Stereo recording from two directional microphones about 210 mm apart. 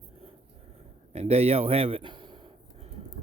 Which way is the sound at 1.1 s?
30° right (ahead or behind).